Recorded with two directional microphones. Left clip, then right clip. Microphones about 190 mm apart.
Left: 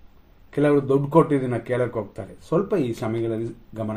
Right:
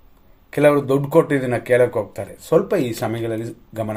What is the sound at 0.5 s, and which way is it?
Speech, 15° right (ahead or behind).